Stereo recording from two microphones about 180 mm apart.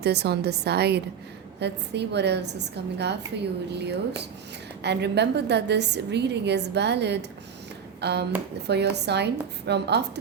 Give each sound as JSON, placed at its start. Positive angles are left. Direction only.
{"t": 0.0, "sound": "a woman's voice", "side_deg": -65}